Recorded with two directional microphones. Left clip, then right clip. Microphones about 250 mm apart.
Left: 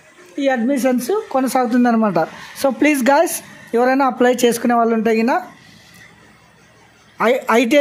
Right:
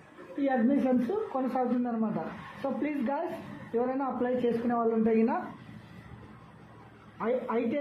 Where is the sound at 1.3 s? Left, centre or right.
Left.